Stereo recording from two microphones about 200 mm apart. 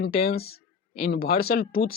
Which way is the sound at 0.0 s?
50° left (ahead or behind).